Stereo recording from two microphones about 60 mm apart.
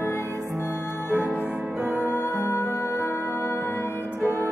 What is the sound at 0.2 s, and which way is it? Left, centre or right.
Music, right.